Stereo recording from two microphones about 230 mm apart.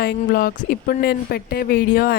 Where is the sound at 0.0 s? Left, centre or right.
Left.